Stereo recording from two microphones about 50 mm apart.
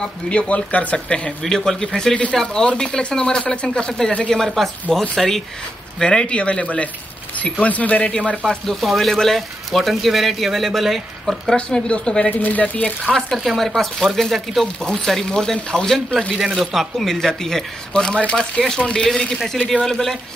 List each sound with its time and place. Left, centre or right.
0.0 s speech: left
4.3 s speech: centre
5.9 s speech: centre
8.5 s speech: centre
11.5 s speech: left
12.3 s speech: left
13.1 s speech: centre
16.3 s speech: centre
19.3 s speech: centre